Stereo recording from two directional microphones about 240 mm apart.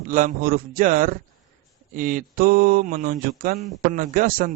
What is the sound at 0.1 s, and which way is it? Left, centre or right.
A man's voice, right.